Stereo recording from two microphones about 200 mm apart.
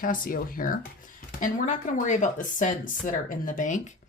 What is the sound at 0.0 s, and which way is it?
Speech, 45° left (ahead or behind).